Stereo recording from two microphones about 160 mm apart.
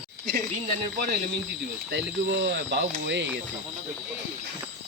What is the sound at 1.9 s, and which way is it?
Speech, 90° right.